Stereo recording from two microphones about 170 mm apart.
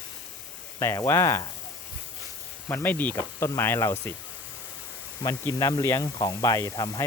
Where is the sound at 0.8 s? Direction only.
20° left (ahead or behind).